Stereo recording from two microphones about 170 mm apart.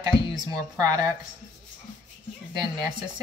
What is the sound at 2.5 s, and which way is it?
Speech, 25° right (ahead or behind).